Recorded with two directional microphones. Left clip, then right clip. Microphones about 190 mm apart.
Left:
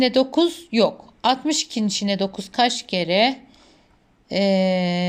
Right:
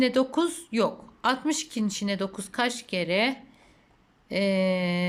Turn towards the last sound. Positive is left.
turn(degrees=-5)  # may be behind; listen again after turning